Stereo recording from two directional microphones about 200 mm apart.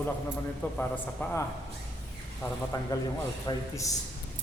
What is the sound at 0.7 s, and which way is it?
Speech, 5° left (ahead or behind).